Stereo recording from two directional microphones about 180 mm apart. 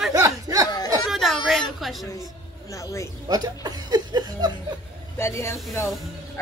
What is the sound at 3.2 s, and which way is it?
Speech, 20° right (ahead or behind).